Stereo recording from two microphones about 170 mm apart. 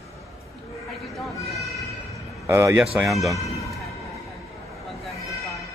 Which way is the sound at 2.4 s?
15° right (ahead or behind).